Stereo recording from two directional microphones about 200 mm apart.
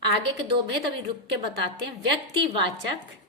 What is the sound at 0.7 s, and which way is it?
Speech, 55° right (ahead or behind).